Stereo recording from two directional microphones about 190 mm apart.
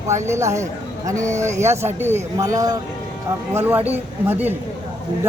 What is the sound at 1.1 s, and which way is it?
Speech, 40° right (ahead or behind).